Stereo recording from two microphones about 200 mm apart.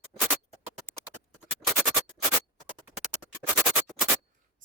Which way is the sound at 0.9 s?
10° right (ahead or behind).